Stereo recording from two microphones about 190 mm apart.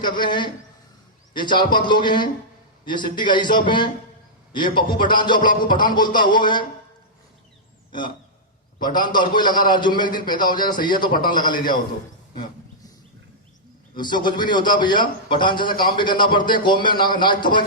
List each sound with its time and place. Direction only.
0.1 s a man's voice: 25° left (ahead or behind)
8.8 s a man's voice: 25° left (ahead or behind)
13.9 s a man's voice: 25° left (ahead or behind)